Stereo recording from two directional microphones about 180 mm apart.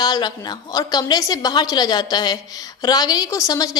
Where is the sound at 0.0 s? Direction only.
25° left (ahead or behind).